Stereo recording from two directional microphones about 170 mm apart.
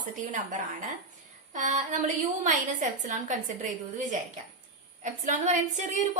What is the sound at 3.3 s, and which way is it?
A woman's voice, 45° right (ahead or behind).